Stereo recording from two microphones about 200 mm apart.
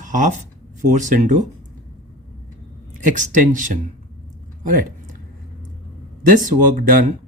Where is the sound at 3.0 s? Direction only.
40° right (ahead or behind).